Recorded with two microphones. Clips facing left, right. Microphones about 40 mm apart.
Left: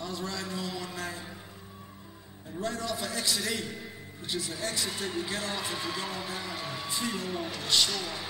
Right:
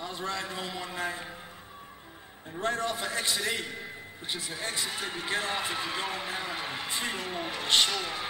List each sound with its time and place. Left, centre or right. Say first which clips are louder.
0.0 s a man's voice: right 1 dB; right
2.6 s a man's voice: right 3 dB; right; by 5.1 s centre
5.1 s a man's voice: right 2 dB; right